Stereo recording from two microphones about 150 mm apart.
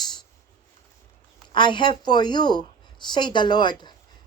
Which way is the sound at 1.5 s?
30° left (ahead or behind).